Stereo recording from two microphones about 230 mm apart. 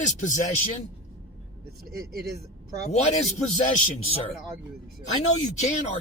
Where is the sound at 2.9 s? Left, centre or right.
Left.